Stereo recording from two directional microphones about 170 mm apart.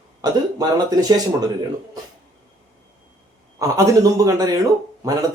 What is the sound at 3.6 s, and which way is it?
Speech, 20° right (ahead or behind).